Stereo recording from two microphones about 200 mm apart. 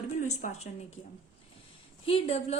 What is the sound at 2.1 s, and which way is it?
Speech, 30° left (ahead or behind).